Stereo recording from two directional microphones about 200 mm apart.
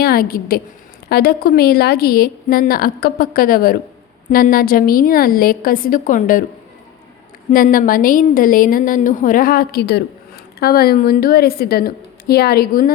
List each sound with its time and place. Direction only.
0.0 s a woman's voice: 50° left (ahead or behind)
7.5 s a woman's voice: 45° left (ahead or behind)